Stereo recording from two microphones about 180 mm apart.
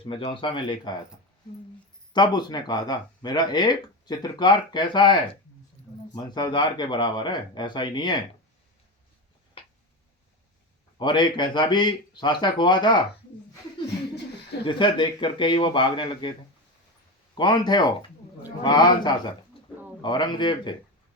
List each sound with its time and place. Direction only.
0.0 s speech: 30° left (ahead or behind)
2.1 s speech: 25° left (ahead or behind)
9.6 s a sound: 30° left (ahead or behind)
10.9 s speech: 25° left (ahead or behind)
14.6 s speech: 25° left (ahead or behind)
17.3 s speech: 25° left (ahead or behind)